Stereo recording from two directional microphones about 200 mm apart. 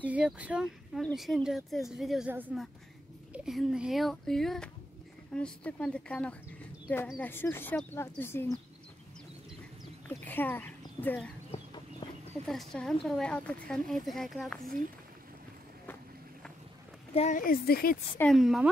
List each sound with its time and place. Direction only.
0.0 s speech: 5° right (ahead or behind); by 8.5 s 10° left (ahead or behind)
10.0 s speech: 10° left (ahead or behind)
11.5 s chicken: 25° left (ahead or behind)
12.4 s speech: centre (ahead or behind)
17.1 s speech: 35° left (ahead or behind)
18.1 s speech: 5° left (ahead or behind)